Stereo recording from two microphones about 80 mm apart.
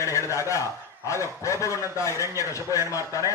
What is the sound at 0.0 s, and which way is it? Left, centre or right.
A man's voice, left.